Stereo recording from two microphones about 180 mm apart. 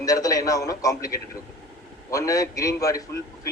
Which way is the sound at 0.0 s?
20° left (ahead or behind).